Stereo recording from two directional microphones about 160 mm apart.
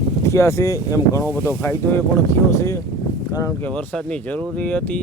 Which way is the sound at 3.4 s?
10° left (ahead or behind).